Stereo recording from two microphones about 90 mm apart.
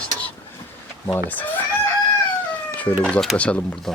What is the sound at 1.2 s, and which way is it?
Speech, 20° left (ahead or behind).